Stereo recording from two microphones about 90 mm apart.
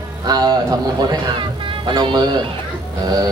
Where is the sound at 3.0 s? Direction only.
50° right (ahead or behind).